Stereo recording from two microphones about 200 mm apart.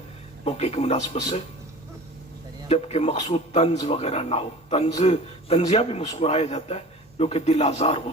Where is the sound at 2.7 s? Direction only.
30° left (ahead or behind).